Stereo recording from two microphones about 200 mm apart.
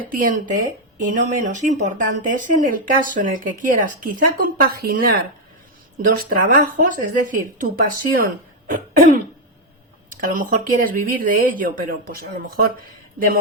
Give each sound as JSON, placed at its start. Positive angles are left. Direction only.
{"t": 0.0, "sound": "speech", "side_deg": -45}
{"t": 6.0, "sound": "speech", "side_deg": -45}
{"t": 8.7, "sound": "throat clearing", "side_deg": -40}
{"t": 10.2, "sound": "speech", "side_deg": -45}